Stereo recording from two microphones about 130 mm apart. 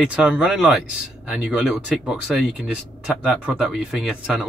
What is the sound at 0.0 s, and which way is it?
Speech, 5° right (ahead or behind).